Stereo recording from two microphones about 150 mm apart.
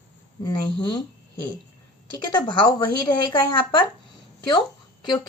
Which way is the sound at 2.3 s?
30° left (ahead or behind).